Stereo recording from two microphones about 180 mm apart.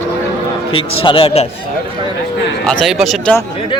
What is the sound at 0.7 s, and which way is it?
Speech, 30° left (ahead or behind).